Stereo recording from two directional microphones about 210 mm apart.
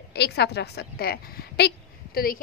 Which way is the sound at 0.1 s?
50° left (ahead or behind).